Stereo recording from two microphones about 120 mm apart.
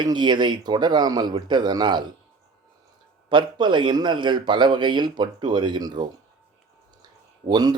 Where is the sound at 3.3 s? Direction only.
40° right (ahead or behind).